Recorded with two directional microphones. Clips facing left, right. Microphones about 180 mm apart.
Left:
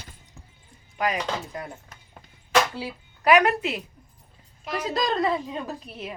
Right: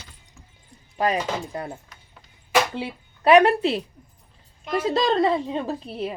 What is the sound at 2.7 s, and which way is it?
Speech, 25° right (ahead or behind).